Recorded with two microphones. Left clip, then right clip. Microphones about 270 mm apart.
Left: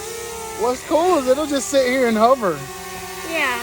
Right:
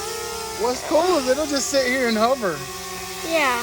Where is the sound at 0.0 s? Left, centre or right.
Centre.